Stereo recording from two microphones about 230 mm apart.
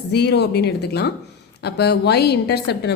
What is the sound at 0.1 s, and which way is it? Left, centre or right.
A woman's voice, left.